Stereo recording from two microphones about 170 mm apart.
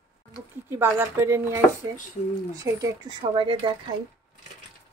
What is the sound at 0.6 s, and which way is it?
Speech, 15° right (ahead or behind).